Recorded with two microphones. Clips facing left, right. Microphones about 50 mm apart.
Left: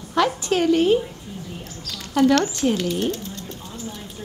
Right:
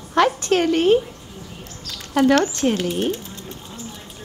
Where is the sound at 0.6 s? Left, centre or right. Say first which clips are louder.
Even; right.